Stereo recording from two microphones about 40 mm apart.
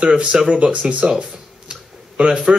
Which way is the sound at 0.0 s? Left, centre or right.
Right.